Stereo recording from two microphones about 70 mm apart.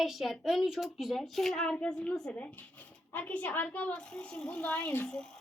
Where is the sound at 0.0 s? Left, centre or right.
Centre.